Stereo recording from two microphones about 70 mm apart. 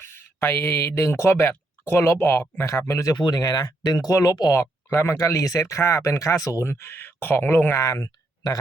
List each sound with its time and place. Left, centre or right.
0.0 s speech: left
3.2 s speech: left
6.7 s speech: left
7.9 s speech: left